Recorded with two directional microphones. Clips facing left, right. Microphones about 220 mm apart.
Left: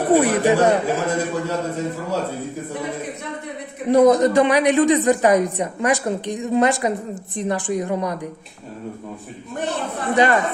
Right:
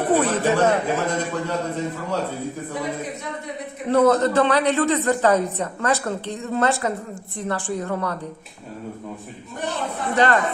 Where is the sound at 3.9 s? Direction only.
15° left (ahead or behind).